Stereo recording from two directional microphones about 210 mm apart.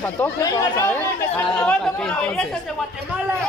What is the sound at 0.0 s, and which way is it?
Speech, 10° left (ahead or behind).